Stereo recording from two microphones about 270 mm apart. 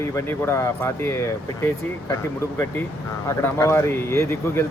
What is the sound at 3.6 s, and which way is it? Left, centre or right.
A man's voice, centre.